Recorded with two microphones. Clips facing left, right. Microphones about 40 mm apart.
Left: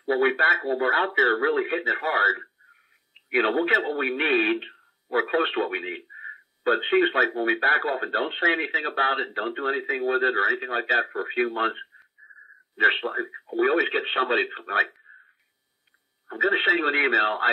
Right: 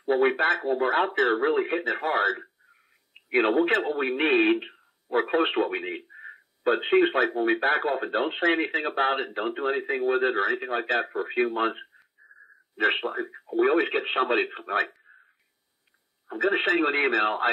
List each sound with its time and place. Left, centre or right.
0.1 s speech: centre
12.7 s speech: centre
14.7 s speech: centre
16.3 s speech: centre